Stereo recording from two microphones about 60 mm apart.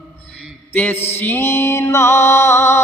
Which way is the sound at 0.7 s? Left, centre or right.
Left.